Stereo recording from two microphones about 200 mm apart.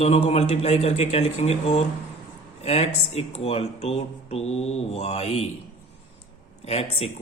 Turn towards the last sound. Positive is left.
turn(degrees=30)  # may be behind; listen again after turning